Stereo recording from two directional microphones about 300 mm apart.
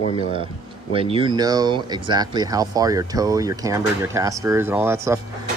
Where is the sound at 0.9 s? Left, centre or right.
Centre.